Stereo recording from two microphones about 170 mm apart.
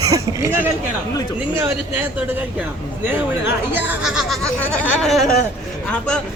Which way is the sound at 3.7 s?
10° right (ahead or behind).